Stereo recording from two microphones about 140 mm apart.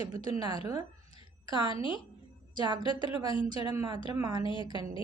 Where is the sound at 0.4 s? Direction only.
25° right (ahead or behind).